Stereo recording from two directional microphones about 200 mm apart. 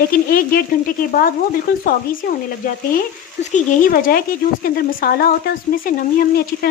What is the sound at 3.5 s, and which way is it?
Speech, 40° left (ahead or behind).